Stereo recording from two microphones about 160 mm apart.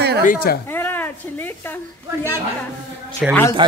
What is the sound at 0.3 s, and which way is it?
Speech, 70° left (ahead or behind).